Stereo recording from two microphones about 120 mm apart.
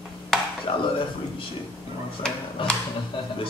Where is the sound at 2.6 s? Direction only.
45° left (ahead or behind).